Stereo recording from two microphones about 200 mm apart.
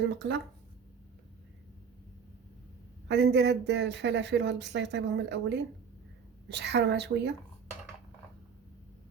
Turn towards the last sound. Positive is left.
turn(degrees=-60)  # may be behind; listen again after turning